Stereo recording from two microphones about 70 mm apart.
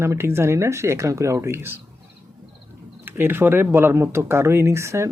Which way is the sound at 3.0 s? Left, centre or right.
Right.